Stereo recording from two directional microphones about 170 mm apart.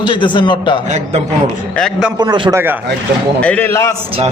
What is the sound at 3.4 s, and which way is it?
Speech, 10° left (ahead or behind).